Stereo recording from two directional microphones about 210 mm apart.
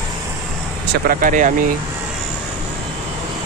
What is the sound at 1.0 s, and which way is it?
Speech, 40° right (ahead or behind).